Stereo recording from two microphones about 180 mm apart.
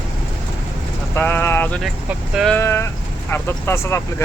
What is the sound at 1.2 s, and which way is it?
Speech, 10° left (ahead or behind).